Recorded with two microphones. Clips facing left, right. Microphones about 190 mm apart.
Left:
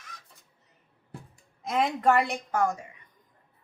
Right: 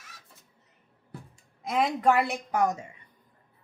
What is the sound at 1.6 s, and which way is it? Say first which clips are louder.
Speech: even; centre (ahead or behind).